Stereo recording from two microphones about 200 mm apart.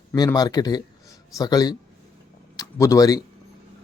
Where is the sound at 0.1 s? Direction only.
15° left (ahead or behind).